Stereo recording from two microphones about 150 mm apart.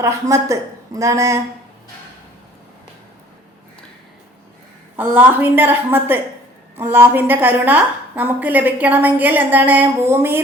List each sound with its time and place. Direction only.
0.0 s speech: 20° right (ahead or behind)
4.9 s a woman's voice: 10° right (ahead or behind)